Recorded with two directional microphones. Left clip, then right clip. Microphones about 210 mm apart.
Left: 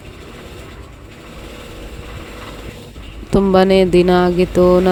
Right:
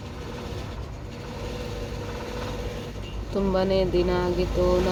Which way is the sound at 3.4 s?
55° left (ahead or behind).